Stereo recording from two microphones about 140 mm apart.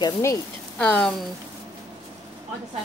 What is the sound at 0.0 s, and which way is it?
Speech, 25° left (ahead or behind).